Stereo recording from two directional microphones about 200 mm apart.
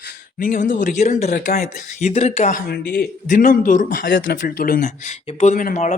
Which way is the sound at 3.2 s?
40° left (ahead or behind).